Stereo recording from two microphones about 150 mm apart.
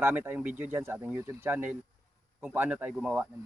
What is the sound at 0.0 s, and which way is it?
Speech, 10° right (ahead or behind).